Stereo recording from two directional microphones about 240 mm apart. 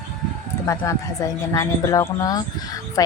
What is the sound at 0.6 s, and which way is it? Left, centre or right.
Speech, centre.